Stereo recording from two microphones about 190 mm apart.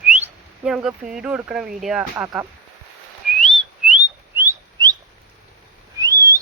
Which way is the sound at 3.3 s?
Centre (ahead or behind).